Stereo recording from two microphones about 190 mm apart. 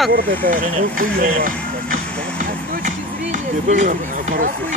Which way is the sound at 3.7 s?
40° right (ahead or behind).